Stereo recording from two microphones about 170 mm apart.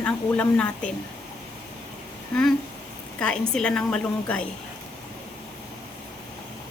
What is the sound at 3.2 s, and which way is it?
A woman's voice, 5° left (ahead or behind).